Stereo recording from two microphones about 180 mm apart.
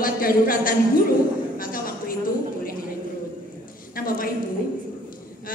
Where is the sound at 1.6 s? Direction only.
50° left (ahead or behind).